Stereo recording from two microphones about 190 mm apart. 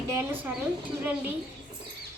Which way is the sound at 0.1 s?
10° right (ahead or behind).